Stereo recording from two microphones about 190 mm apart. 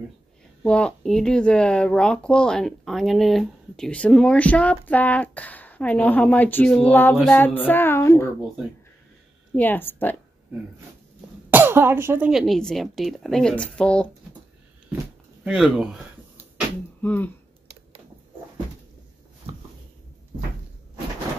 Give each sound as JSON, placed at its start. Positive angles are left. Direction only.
{"t": 0.7, "sound": "a woman's voice", "side_deg": 5}
{"t": 9.6, "sound": "a woman's voice", "side_deg": 10}
{"t": 11.5, "sound": "speech", "side_deg": -10}
{"t": 15.4, "sound": "speech", "side_deg": 0}
{"t": 17.0, "sound": "a woman's voice", "side_deg": 10}